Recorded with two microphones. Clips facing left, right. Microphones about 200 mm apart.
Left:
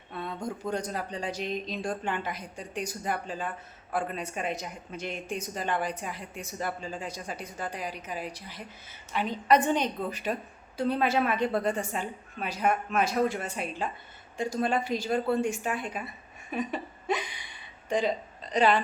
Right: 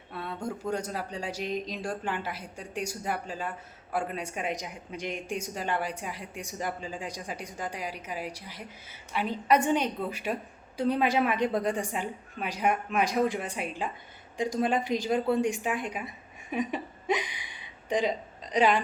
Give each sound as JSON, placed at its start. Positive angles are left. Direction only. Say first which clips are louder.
{"t": 0.1, "sound": "a woman's voice", "louder": "even", "side_deg": -5}